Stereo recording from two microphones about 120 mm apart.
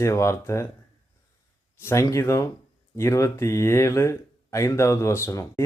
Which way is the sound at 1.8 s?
20° left (ahead or behind).